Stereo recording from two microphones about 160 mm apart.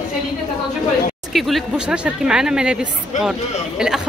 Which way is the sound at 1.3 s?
Centre (ahead or behind).